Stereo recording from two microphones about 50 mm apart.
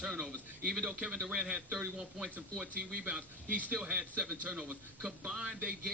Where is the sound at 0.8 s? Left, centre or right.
Centre.